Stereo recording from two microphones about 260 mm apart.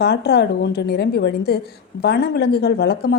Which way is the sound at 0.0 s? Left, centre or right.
Left.